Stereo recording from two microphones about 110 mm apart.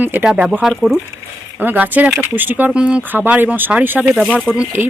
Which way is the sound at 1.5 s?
15° right (ahead or behind).